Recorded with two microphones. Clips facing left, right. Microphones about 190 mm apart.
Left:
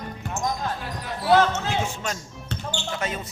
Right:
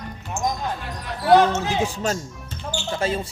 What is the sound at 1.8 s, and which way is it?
Speech, 35° right (ahead or behind).